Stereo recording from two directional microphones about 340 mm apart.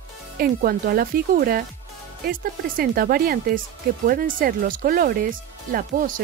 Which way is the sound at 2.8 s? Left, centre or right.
Right.